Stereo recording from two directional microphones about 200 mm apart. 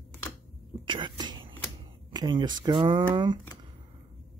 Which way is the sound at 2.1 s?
20° right (ahead or behind).